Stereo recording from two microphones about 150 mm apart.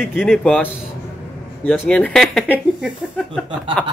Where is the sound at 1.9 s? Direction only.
5° left (ahead or behind).